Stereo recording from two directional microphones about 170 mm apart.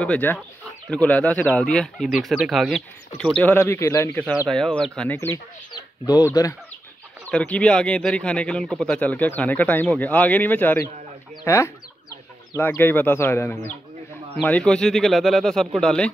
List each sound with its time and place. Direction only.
0.0 s speech: 10° left (ahead or behind)
3.2 s speech: 10° left (ahead or behind)
7.2 s speech: 10° left (ahead or behind)